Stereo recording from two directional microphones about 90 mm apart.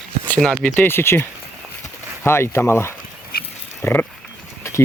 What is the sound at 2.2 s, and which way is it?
Speech, 30° left (ahead or behind).